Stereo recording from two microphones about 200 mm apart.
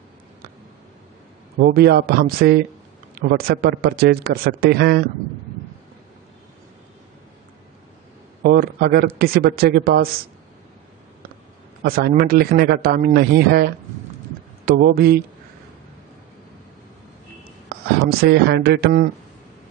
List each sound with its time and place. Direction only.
1.6 s speech: 50° right (ahead or behind)
8.4 s speech: 50° right (ahead or behind)
11.8 s a man's voice: 45° right (ahead or behind)
17.7 s a sound: 55° right (ahead or behind)
18.2 s speech: 55° right (ahead or behind)